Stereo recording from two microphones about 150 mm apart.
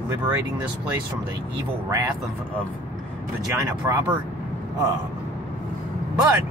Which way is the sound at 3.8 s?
15° right (ahead or behind).